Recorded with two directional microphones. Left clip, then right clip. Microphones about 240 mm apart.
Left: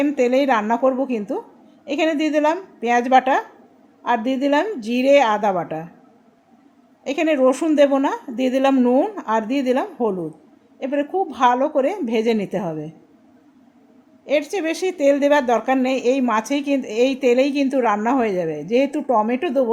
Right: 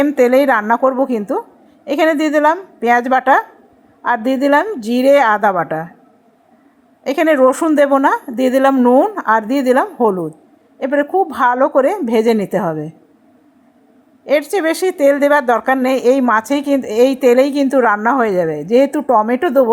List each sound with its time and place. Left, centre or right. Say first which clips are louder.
0.0 s speech: right 6 dB; centre
7.0 s speech: right 6 dB; centre
14.3 s speech: right 6 dB; centre